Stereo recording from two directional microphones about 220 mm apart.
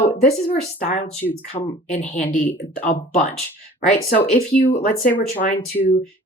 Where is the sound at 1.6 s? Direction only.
25° left (ahead or behind).